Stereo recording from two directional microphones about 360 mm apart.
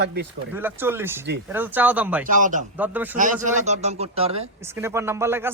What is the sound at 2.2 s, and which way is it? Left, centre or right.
Speech, right.